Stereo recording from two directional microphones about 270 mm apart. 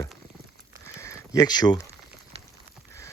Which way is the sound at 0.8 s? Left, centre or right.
Centre.